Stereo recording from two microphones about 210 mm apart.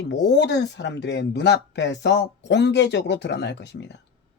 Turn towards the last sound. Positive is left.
turn(degrees=55)  # may be behind; listen again after turning